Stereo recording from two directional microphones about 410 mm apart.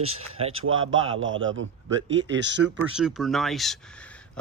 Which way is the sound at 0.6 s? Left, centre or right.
Right.